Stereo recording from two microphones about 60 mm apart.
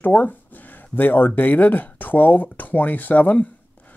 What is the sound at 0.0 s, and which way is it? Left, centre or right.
Speech, left.